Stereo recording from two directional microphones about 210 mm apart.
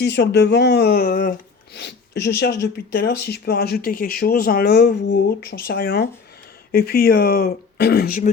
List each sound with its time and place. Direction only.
0.0 s speech: 55° left (ahead or behind)